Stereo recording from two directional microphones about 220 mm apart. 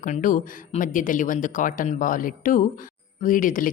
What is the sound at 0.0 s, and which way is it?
Speech, 35° left (ahead or behind).